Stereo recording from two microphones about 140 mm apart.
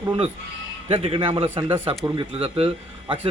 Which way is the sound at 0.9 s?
40° right (ahead or behind).